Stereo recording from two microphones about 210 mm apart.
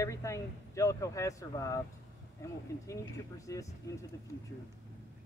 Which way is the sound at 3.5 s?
15° left (ahead or behind).